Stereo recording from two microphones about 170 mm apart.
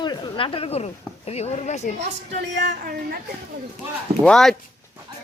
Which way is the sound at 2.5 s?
90° right.